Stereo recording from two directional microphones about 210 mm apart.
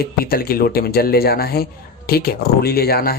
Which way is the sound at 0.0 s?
45° left (ahead or behind).